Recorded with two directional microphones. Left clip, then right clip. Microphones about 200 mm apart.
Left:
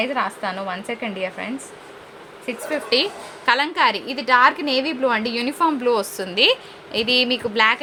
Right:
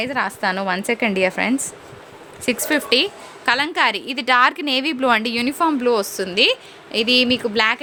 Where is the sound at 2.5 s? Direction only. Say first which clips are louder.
Right 4 dB; 50° right (ahead or behind).